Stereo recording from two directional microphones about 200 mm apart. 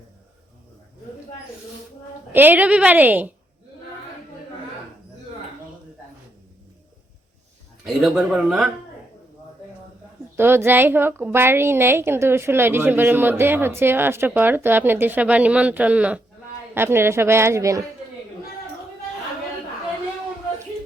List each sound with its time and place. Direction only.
2.3 s a woman's voice: 10° right (ahead or behind)
7.9 s speech: centre (ahead or behind)
10.3 s a woman's voice: 10° right (ahead or behind)